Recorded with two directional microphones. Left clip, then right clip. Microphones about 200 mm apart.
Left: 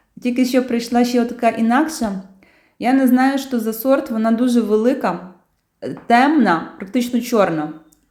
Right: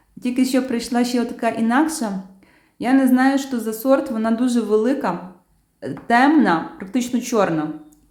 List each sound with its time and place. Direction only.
0.2 s speech: 5° left (ahead or behind)